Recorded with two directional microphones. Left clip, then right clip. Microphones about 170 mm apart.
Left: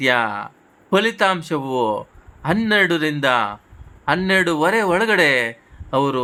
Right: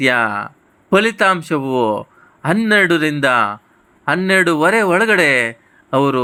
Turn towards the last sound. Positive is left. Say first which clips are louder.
# right 4 dB
turn(degrees=-20)  # may be behind; listen again after turning